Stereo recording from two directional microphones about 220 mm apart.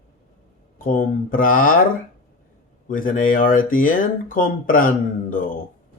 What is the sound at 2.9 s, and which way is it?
Speech, 40° left (ahead or behind).